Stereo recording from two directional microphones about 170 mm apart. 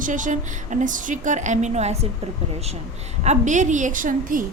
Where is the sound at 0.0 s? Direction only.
50° right (ahead or behind).